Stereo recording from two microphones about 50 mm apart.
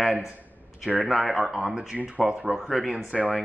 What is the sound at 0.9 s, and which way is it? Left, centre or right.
Speech, right.